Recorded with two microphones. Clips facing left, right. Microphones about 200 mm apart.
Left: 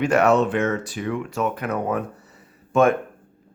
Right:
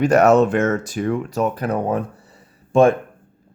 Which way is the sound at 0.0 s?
40° right (ahead or behind).